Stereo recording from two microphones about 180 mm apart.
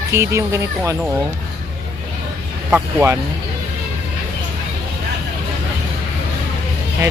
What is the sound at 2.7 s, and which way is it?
Speech, 15° right (ahead or behind).